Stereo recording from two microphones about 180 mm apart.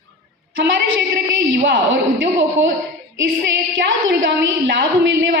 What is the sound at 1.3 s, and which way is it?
Speech, 85° right.